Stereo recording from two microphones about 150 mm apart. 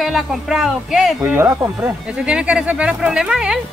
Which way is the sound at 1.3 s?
15° right (ahead or behind).